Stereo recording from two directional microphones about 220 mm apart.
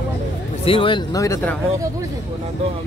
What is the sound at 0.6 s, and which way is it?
Speech, 25° left (ahead or behind).